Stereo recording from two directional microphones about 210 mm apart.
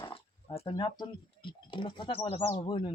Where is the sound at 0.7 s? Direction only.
20° left (ahead or behind).